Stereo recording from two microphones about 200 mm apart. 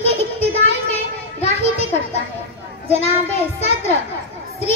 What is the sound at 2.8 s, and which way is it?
Speech, 35° left (ahead or behind).